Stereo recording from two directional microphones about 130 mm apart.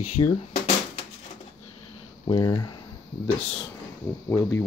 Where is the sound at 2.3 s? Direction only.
35° left (ahead or behind).